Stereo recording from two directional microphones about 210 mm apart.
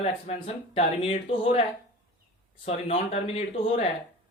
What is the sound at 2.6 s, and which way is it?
Speech, 30° left (ahead or behind).